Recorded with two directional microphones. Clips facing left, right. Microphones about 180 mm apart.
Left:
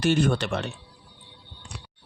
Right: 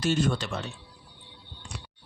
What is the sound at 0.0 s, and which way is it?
Speech, 60° left (ahead or behind).